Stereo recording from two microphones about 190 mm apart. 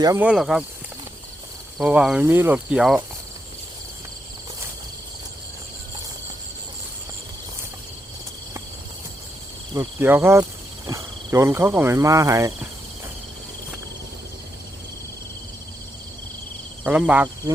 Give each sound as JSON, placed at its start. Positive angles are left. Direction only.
{"t": 0.2, "sound": "speech", "side_deg": -5}
{"t": 1.8, "sound": "speech", "side_deg": -5}
{"t": 9.7, "sound": "speech", "side_deg": -10}
{"t": 16.8, "sound": "speech", "side_deg": -5}